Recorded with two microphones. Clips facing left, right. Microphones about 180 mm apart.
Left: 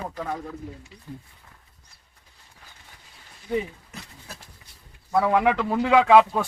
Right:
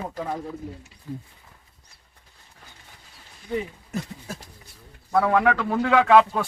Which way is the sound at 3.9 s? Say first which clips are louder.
Right 11 dB; 45° right (ahead or behind).